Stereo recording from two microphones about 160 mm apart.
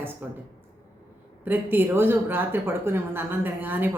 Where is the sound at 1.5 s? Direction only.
15° right (ahead or behind).